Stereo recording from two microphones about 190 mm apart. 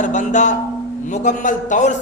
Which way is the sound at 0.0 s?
40° left (ahead or behind).